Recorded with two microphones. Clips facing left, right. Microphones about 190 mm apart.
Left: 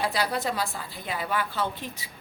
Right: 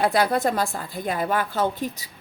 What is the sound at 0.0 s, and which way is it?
A woman's voice, 50° right (ahead or behind).